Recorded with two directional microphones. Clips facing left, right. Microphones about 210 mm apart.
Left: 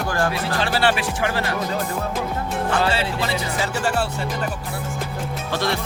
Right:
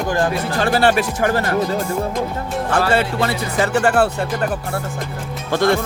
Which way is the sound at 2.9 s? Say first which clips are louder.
Right 5 dB; 55° right (ahead or behind).